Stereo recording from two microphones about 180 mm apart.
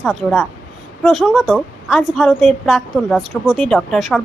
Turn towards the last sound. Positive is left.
turn(degrees=5)  # may be behind; listen again after turning